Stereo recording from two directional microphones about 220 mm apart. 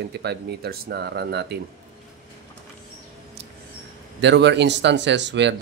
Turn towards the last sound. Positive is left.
turn(degrees=-55)  # may be behind; listen again after turning